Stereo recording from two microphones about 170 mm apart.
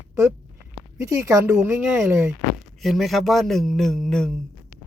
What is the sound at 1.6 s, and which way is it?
Speech, 5° right (ahead or behind).